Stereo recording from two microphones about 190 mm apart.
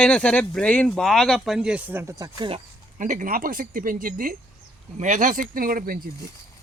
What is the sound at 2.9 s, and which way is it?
Speech, 45° right (ahead or behind).